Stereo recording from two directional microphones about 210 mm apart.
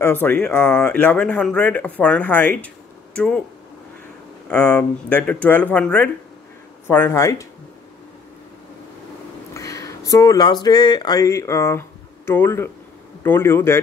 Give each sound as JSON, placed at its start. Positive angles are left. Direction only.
{"t": 0.0, "sound": "a man's voice", "side_deg": 10}
{"t": 4.5, "sound": "a man's voice", "side_deg": 5}
{"t": 9.5, "sound": "a man's voice", "side_deg": 15}